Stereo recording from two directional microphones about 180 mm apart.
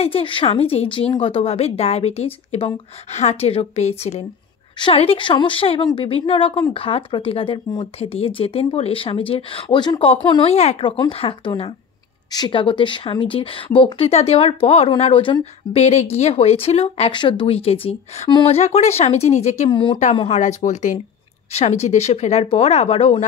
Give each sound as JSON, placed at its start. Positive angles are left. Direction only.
{"t": 0.0, "sound": "speech", "side_deg": 30}
{"t": 19.7, "sound": "speech", "side_deg": 25}
{"t": 20.3, "sound": "speech", "side_deg": 40}